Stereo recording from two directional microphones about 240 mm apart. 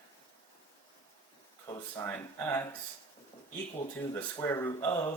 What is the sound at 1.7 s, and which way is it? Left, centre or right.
Speech, centre.